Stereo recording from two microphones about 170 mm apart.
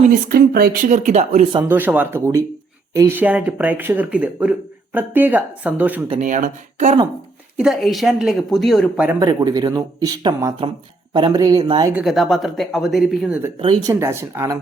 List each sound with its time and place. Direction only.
0.3 s speech: 60° right (ahead or behind); by 1.5 s 40° right (ahead or behind)
1.6 s speech: 10° right (ahead or behind)
6.2 s speech: 50° right (ahead or behind)
7.5 s speech: 5° right (ahead or behind)
9.0 s speech: 20° right (ahead or behind)
11.9 s speech: centre (ahead or behind)
13.8 s speech: 15° right (ahead or behind)